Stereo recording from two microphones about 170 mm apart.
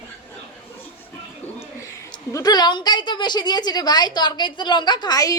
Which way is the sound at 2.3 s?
25° left (ahead or behind).